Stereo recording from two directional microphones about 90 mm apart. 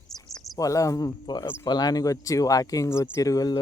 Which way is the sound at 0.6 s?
40° left (ahead or behind).